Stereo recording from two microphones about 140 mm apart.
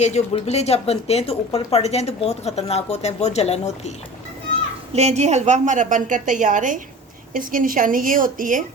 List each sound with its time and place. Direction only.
0.0 s speech: 50° left (ahead or behind)
4.9 s a woman's voice: 50° right (ahead or behind)
7.3 s a woman's voice: 75° right (ahead or behind)